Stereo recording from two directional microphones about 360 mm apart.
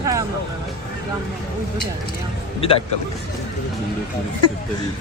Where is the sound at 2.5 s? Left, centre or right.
Centre.